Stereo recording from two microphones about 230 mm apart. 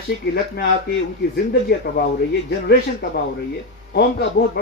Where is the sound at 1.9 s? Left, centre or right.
Left.